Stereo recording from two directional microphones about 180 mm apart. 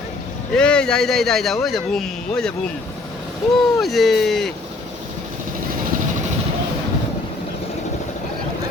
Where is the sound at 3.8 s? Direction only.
Centre (ahead or behind).